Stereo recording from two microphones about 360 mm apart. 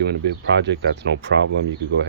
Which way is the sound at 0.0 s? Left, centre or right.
Right.